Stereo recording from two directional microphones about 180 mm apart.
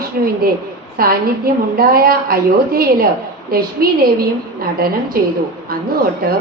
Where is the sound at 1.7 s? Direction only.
55° right (ahead or behind).